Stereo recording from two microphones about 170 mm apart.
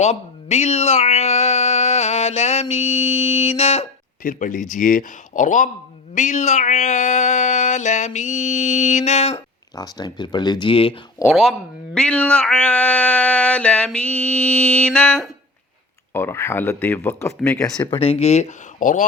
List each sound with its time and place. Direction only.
0.0 s speech: 40° left (ahead or behind)
4.2 s speech: 50° left (ahead or behind)
9.7 s speech: 25° left (ahead or behind)
11.3 s speech: centre (ahead or behind); by 17.7 s 15° left (ahead or behind)
17.9 s speech: 35° left (ahead or behind); by 19.0 s 50° left (ahead or behind)